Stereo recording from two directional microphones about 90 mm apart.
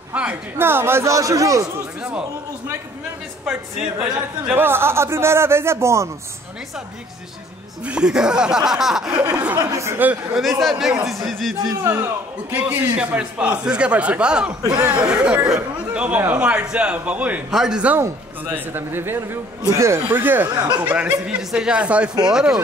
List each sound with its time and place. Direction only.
0.1 s a sound: 15° right (ahead or behind)
0.6 s speech: 25° right (ahead or behind)
2.0 s a man's voice: 10° right (ahead or behind)
3.4 s a man's voice: 5° right (ahead or behind)
4.6 s a man's voice: 25° right (ahead or behind)
7.8 s a man's voice: 10° right (ahead or behind)
9.6 s speech: 35° right (ahead or behind)
10.3 s speech: 5° right (ahead or behind)
11.8 s a man's voice: 30° right (ahead or behind)
12.5 s a man's voice: 20° right (ahead or behind)
14.6 s speech: 40° right (ahead or behind)
14.9 s a man's voice: 10° right (ahead or behind)
17.9 s a man's voice: 20° right (ahead or behind)
20.0 s a man's voice: 20° right (ahead or behind)